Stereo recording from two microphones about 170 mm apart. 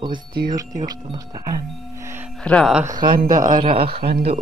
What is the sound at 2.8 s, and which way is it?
Speech, 25° right (ahead or behind).